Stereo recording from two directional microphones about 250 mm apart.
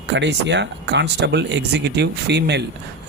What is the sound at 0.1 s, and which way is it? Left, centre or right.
Speech, right.